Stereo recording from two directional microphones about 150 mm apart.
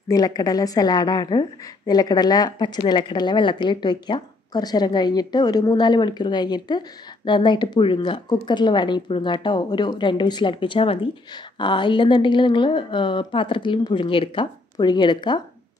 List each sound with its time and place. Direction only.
0.1 s a woman's voice: 25° left (ahead or behind)